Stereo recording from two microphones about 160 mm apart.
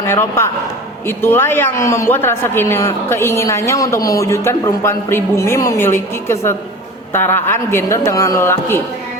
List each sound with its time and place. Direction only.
0.0 s a man's voice: 15° left (ahead or behind)